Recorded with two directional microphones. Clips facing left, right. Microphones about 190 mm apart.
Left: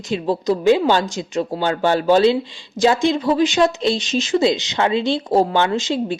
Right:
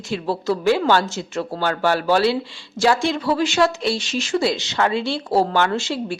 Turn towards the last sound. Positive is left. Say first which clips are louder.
# left 3 dB
turn(degrees=20)  # may be behind; listen again after turning